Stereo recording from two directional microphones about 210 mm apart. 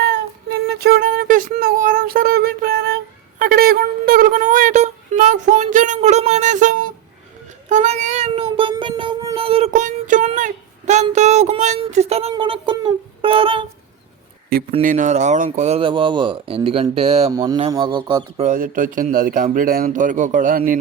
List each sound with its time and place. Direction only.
0.0 s a sound: 55° right (ahead or behind)
7.7 s child singing: 35° right (ahead or behind)
14.8 s speech: 40° right (ahead or behind)
17.3 s speech: 20° right (ahead or behind)
18.3 s speech: 40° right (ahead or behind)